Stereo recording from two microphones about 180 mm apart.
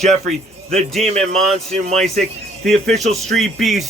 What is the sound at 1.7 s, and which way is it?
Speech, 35° right (ahead or behind).